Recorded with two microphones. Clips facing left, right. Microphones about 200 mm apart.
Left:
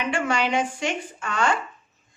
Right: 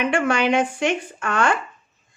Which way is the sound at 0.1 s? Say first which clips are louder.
Right 4 dB; 55° right (ahead or behind).